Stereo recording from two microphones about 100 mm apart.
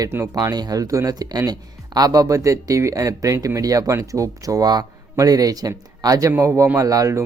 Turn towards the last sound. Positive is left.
turn(degrees=-35)  # may be behind; listen again after turning